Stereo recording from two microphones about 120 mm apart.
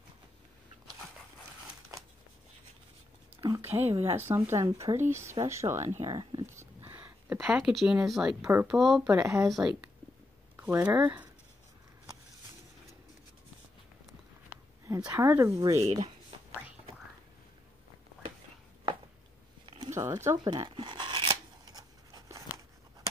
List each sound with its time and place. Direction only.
3.3 s speech: 25° right (ahead or behind)
5.9 s speech: 35° right (ahead or behind)
6.4 s a sound: 20° right (ahead or behind)
7.3 s speech: 5° right (ahead or behind)
9.2 s speech: 25° right (ahead or behind)
9.5 s speech: 5° right (ahead or behind)
10.5 s speech: 15° right (ahead or behind)
15.0 s speech: 20° right (ahead or behind)
19.9 s speech: 20° right (ahead or behind)
20.4 s a sound: 40° right (ahead or behind)